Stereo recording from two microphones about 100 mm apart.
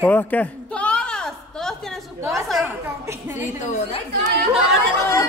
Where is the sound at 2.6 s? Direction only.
20° right (ahead or behind).